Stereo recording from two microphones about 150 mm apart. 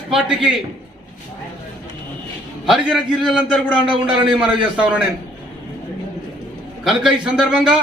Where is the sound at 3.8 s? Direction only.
35° right (ahead or behind).